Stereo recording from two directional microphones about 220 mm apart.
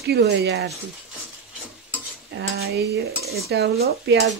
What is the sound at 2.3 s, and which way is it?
Stir, 50° right (ahead or behind).